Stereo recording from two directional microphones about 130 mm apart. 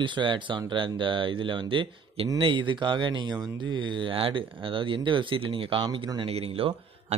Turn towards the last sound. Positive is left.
turn(degrees=-45)  # may be behind; listen again after turning